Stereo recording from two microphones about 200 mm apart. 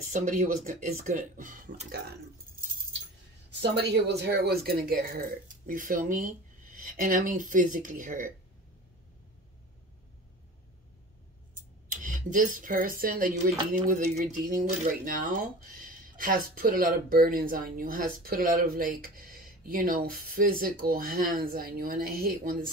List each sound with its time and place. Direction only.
0.1 s speech: 40° right (ahead or behind)
3.6 s speech: 55° right (ahead or behind)
12.0 s speech: 40° right (ahead or behind)